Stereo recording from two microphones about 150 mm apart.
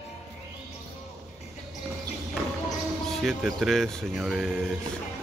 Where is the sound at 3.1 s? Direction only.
Centre (ahead or behind).